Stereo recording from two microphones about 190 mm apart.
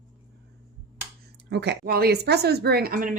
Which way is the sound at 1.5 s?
60° right (ahead or behind).